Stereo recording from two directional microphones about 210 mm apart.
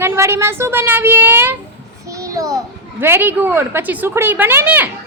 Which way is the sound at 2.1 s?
15° right (ahead or behind).